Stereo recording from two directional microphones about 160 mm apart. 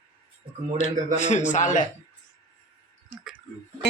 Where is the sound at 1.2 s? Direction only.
45° left (ahead or behind).